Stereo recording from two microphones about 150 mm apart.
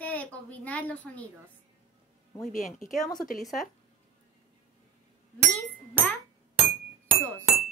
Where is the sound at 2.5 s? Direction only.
55° left (ahead or behind).